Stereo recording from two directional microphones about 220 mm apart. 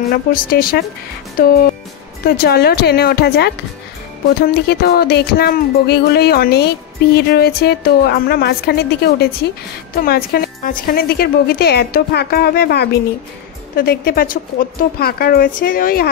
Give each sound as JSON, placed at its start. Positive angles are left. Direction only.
{"t": 0.1, "sound": "music", "side_deg": 40}
{"t": 1.4, "sound": "a woman's voice", "side_deg": 40}
{"t": 2.2, "sound": "music", "side_deg": 45}
{"t": 13.7, "sound": "a woman's voice", "side_deg": 45}